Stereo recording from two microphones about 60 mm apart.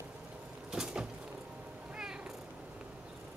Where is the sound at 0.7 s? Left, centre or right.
Centre.